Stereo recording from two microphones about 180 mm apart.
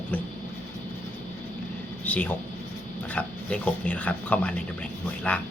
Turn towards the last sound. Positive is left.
turn(degrees=5)  # may be behind; listen again after turning